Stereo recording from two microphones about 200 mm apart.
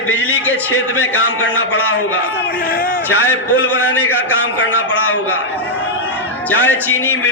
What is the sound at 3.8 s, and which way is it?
Music, 10° left (ahead or behind).